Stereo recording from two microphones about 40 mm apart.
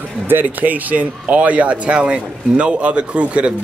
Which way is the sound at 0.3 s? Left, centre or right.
Right.